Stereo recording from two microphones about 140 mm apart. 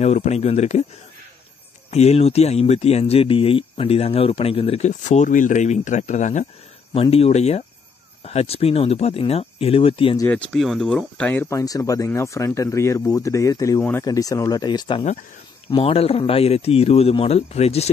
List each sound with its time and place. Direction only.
0.0 s speech: 50° left (ahead or behind)
1.9 s speech: 50° left (ahead or behind)
6.9 s speech: 45° left (ahead or behind)
10.3 s speech: 5° left (ahead or behind)
11.6 s speech: 25° left (ahead or behind); by 17.8 s 45° left (ahead or behind)